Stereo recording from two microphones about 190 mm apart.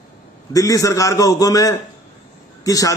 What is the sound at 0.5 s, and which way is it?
A man's voice, 20° left (ahead or behind).